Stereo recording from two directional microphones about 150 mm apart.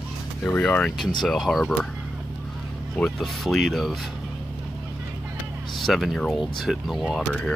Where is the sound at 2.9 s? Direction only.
Centre (ahead or behind).